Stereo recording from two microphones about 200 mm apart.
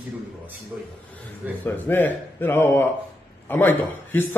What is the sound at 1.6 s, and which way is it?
A man's voice, 10° left (ahead or behind).